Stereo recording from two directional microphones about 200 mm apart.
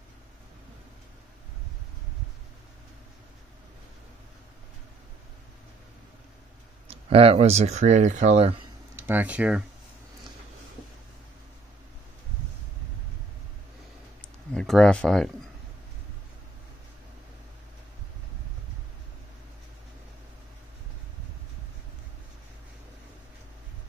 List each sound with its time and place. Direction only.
6.9 s speech: 30° right (ahead or behind)
8.9 s speech: 10° right (ahead or behind)
14.5 s speech: 5° left (ahead or behind)